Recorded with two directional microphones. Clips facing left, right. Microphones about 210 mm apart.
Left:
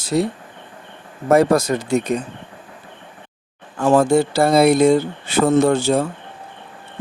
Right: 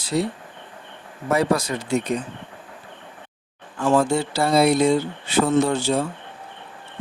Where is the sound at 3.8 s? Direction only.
45° left (ahead or behind).